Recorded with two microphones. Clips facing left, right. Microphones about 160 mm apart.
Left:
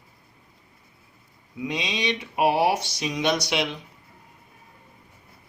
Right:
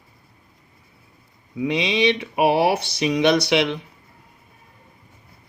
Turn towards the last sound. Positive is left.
turn(degrees=-70)  # may be behind; listen again after turning